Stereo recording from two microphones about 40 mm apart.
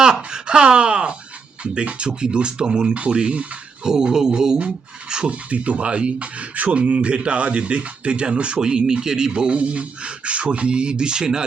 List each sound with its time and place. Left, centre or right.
0.0 s speech: centre
3.8 s music: centre
5.0 s speech: centre
5.3 s speech: right; by 11.4 s centre